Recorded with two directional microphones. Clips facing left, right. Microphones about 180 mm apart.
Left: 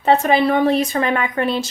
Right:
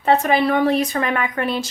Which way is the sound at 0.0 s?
25° left (ahead or behind).